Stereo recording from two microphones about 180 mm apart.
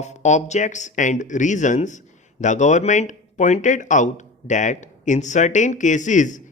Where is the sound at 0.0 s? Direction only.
40° left (ahead or behind).